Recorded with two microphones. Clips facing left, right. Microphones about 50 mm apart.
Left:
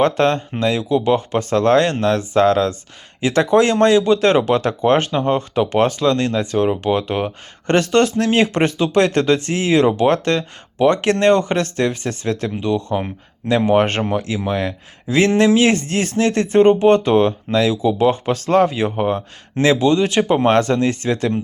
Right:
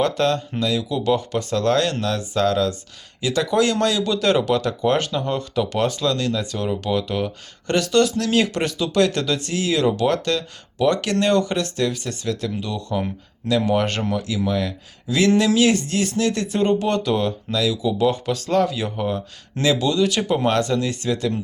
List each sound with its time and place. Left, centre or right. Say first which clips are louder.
0.0 s speech: left 4 dB; left